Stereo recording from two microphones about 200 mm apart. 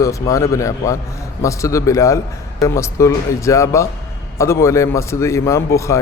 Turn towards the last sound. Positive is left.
turn(degrees=15)  # may be behind; listen again after turning